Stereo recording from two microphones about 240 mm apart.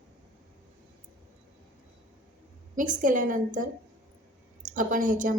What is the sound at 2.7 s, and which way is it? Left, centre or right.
Speech, right.